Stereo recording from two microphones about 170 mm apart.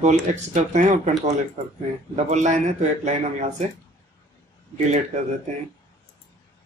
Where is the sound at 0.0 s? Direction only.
45° right (ahead or behind).